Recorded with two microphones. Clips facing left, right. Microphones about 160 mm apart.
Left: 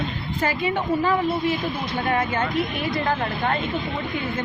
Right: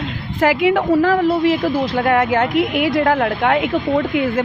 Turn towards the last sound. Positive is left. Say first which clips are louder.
# right 8 dB
turn(degrees=-75)  # may be behind; listen again after turning